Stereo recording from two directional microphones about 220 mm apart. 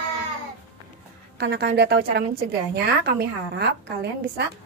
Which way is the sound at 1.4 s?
45° right (ahead or behind).